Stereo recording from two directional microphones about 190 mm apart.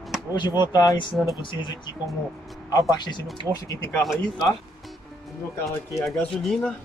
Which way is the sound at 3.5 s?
15° right (ahead or behind).